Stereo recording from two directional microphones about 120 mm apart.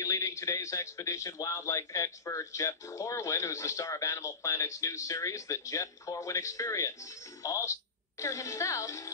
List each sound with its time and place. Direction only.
0.0 s speech: 25° left (ahead or behind)